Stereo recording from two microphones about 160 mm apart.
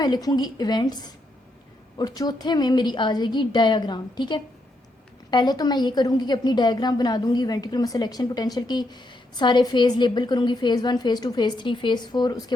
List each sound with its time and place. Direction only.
0.0 s a woman's voice: 25° left (ahead or behind)